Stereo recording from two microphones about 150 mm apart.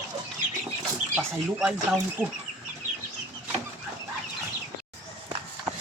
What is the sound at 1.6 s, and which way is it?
Speech, 5° right (ahead or behind).